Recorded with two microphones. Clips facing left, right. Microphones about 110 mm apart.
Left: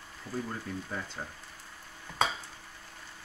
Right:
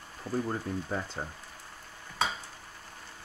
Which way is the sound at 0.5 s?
35° right (ahead or behind).